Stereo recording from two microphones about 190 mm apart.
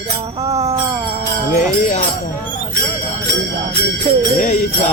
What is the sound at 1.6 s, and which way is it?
Music, 40° left (ahead or behind).